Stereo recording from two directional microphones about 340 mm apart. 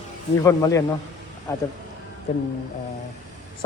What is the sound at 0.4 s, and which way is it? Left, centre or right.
Speech, centre.